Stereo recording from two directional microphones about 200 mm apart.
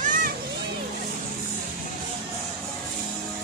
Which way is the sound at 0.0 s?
40° right (ahead or behind).